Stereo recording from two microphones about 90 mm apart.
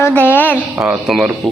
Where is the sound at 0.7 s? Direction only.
5° right (ahead or behind).